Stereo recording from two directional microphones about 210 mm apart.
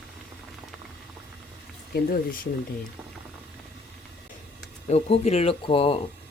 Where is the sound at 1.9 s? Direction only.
40° left (ahead or behind).